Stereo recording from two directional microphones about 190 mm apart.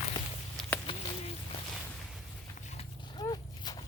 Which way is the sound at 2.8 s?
20° left (ahead or behind).